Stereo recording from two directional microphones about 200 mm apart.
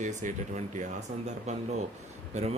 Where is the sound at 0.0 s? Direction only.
35° right (ahead or behind).